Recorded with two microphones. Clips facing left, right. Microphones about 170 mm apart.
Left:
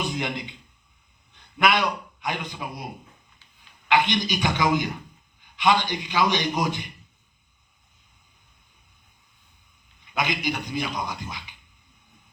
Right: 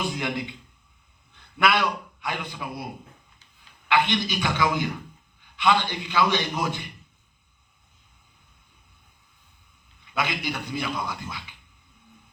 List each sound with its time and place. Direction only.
0.2 s a man's voice: 20° left (ahead or behind)
1.4 s a sound: 20° left (ahead or behind)
2.2 s a man's voice: 20° left (ahead or behind)
3.8 s a man's voice: 15° left (ahead or behind)
10.1 s a man's voice: 15° left (ahead or behind)